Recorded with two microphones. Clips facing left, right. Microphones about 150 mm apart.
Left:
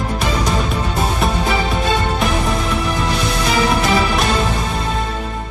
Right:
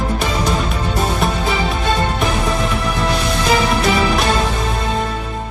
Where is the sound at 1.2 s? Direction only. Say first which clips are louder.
Left 2 dB; centre (ahead or behind).